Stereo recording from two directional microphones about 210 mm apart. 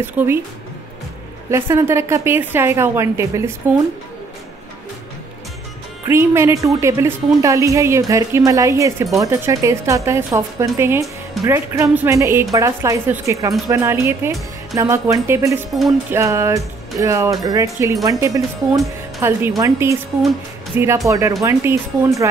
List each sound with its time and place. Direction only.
0.0 s a woman's voice: 10° right (ahead or behind)
1.5 s a woman's voice: 10° right (ahead or behind)
6.0 s a woman's voice: 10° right (ahead or behind)